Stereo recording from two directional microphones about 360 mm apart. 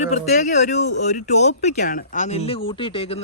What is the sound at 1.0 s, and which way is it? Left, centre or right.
A man's voice, left.